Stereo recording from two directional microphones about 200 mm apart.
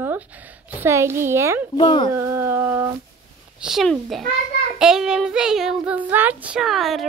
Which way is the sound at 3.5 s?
Centre (ahead or behind).